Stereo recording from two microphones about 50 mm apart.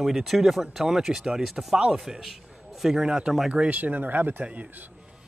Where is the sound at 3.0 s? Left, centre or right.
Centre.